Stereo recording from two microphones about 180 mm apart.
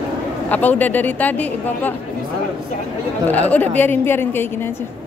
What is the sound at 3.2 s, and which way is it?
Speech, 10° left (ahead or behind).